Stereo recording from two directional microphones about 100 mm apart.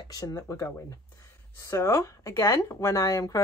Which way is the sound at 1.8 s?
30° left (ahead or behind).